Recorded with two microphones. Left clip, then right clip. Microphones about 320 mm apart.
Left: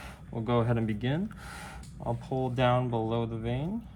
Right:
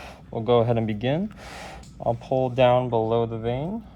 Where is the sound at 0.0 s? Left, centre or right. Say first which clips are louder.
Right 8 dB; centre.